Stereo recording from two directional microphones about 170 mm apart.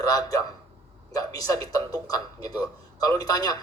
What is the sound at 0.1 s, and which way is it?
A man's voice, 20° left (ahead or behind).